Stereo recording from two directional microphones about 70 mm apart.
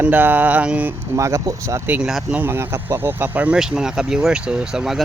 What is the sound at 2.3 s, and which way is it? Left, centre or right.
Speech, right.